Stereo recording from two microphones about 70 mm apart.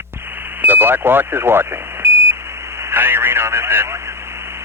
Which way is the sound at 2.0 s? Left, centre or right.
Right.